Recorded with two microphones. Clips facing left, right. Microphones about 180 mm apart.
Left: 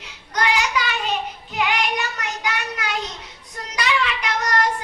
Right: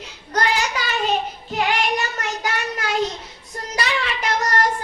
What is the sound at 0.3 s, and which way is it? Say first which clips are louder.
Child singing: even; 40° right (ahead or behind).